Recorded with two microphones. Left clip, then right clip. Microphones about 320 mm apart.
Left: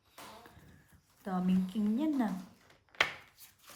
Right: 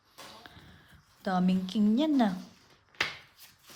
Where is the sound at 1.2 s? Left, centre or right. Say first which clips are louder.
Right 6 dB; right.